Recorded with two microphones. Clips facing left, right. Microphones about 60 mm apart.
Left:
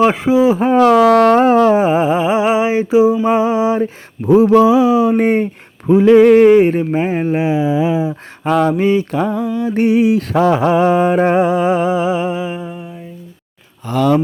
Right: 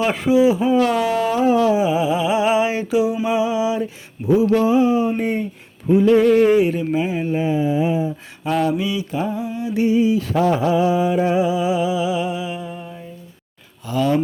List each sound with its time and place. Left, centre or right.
0.0 s speech: left
0.9 s mantra: left
3.2 s mantra: left
4.5 s a sound: left
5.9 s mantra: left
7.4 s a sound: left
8.6 s mantra: left
13.8 s speech: left